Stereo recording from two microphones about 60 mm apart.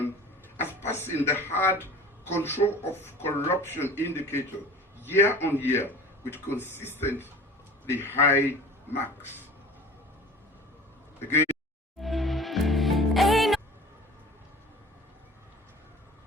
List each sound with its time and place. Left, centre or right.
0.5 s speech: left
11.9 s music: centre